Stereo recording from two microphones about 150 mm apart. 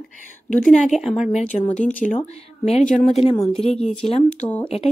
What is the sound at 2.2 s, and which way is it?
Speech, 45° left (ahead or behind).